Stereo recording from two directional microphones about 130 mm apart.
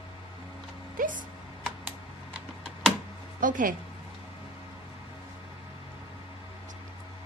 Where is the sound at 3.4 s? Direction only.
90° right.